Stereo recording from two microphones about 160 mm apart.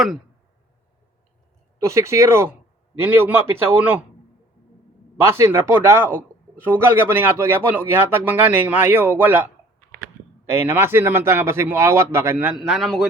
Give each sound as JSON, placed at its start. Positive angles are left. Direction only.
{"t": 1.8, "sound": "a man's voice", "side_deg": -20}
{"t": 5.2, "sound": "a man's voice", "side_deg": -15}